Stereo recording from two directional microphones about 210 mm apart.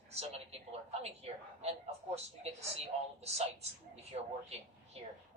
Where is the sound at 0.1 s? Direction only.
30° right (ahead or behind).